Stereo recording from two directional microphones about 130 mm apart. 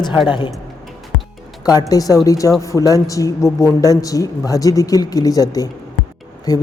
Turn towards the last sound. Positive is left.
turn(degrees=30)  # may be behind; listen again after turning